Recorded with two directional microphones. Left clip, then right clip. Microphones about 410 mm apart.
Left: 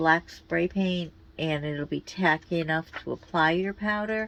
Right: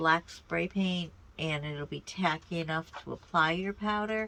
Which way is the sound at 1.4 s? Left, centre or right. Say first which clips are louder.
Left 6 dB; centre.